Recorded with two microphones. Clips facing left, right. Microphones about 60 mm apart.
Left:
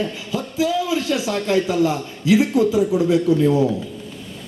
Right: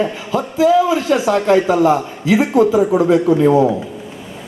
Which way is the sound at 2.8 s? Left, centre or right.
Right.